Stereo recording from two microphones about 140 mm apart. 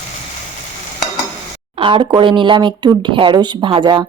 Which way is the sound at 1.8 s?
35° right (ahead or behind).